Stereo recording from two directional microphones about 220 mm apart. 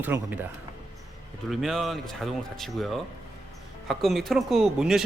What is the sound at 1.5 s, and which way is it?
Speech, centre (ahead or behind).